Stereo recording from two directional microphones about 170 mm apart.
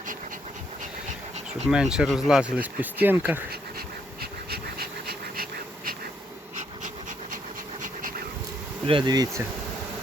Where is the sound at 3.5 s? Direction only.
65° right (ahead or behind).